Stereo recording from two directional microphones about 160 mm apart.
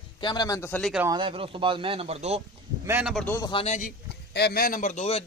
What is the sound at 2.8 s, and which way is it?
Speech, 10° right (ahead or behind).